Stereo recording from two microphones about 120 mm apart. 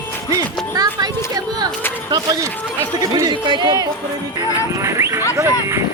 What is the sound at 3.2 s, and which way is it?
Speech, 40° right (ahead or behind).